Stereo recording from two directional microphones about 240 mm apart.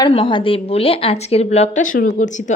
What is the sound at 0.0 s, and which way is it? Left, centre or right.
A woman's voice, left.